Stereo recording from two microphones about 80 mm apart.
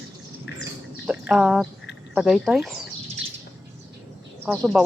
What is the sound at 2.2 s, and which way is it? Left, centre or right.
Speech, centre.